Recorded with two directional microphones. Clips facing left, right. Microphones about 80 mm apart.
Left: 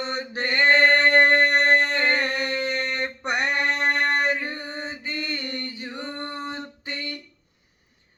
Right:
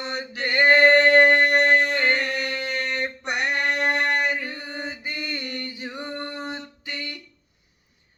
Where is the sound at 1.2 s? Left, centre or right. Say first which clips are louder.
Right 1 dB; left.